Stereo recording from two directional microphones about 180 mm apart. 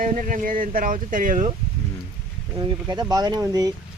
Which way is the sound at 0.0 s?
50° right (ahead or behind).